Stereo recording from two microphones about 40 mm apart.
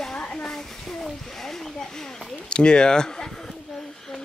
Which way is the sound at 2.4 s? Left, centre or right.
Left.